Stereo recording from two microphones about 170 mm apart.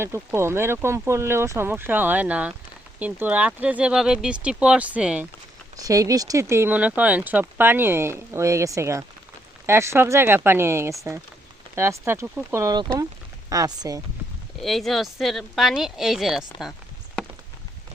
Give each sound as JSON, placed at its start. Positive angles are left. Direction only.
{"t": 0.0, "sound": "speech", "side_deg": -15}
{"t": 5.7, "sound": "speech", "side_deg": -20}
{"t": 14.6, "sound": "speech", "side_deg": 0}